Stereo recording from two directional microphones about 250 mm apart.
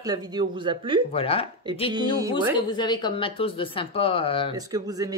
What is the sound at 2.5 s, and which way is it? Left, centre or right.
Speech, centre.